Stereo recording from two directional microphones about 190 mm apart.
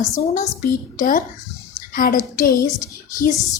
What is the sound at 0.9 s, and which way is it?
A woman's voice, 45° left (ahead or behind).